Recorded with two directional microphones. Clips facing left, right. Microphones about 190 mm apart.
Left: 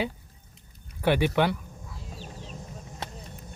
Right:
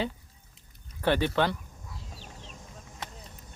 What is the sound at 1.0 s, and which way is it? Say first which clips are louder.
Speech: left 2 dB; 10° left (ahead or behind).